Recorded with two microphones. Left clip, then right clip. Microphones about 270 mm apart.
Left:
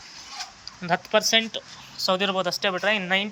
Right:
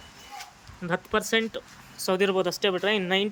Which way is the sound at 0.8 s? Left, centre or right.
Centre.